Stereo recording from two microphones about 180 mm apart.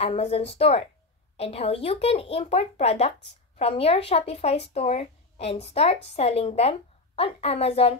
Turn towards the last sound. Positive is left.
turn(degrees=35)  # may be behind; listen again after turning